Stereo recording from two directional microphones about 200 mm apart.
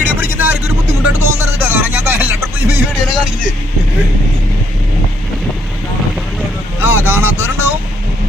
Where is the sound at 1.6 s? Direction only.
10° right (ahead or behind).